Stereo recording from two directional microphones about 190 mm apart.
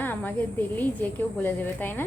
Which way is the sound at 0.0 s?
10° left (ahead or behind).